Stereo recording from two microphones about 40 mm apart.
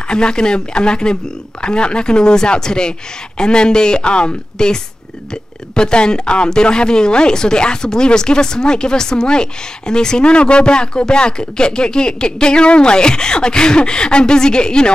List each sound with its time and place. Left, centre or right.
0.1 s speech: left